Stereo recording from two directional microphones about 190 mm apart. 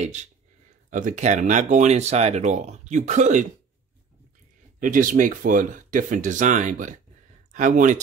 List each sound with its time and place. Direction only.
0.0 s speech: 35° right (ahead or behind)
4.7 s speech: 45° right (ahead or behind)